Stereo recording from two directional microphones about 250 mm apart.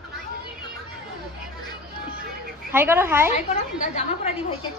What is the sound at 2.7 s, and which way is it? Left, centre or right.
Speech, centre.